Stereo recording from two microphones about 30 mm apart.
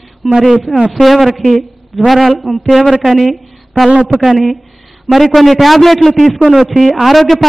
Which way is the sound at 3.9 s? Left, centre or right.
Right.